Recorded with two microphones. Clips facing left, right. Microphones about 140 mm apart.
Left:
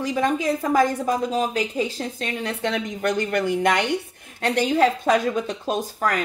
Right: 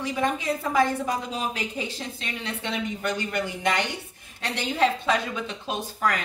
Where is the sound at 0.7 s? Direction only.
40° left (ahead or behind).